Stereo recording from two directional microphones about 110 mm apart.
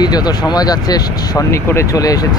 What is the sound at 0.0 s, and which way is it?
Speech, 40° left (ahead or behind).